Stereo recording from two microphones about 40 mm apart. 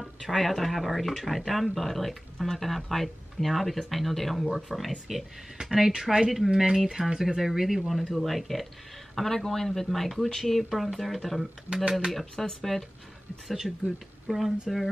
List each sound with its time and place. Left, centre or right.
0.0 s speech: centre
5.6 s speech: centre
13.6 s speech: centre